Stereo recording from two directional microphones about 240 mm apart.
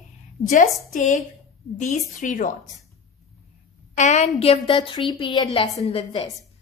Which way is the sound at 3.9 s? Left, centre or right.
Left.